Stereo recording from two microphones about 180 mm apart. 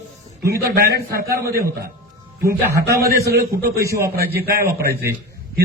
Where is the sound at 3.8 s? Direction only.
15° right (ahead or behind).